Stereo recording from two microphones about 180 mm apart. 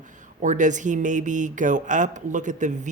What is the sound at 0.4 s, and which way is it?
Speech, 45° right (ahead or behind).